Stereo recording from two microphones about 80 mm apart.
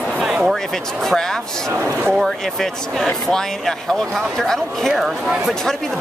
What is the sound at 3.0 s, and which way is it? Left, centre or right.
Speech, centre.